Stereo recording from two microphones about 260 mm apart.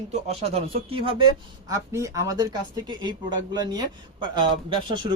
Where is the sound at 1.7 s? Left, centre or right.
Centre.